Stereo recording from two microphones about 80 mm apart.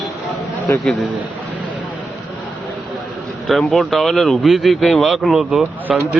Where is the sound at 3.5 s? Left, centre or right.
Centre.